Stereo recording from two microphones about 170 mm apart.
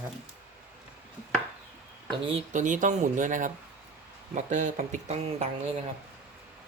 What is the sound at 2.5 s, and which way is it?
Speech, 45° right (ahead or behind).